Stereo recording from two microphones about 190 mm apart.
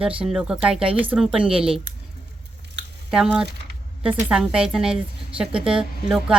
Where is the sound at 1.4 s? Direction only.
30° right (ahead or behind).